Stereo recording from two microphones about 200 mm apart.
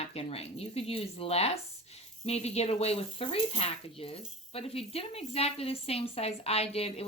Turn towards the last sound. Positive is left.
turn(degrees=30)  # may be behind; listen again after turning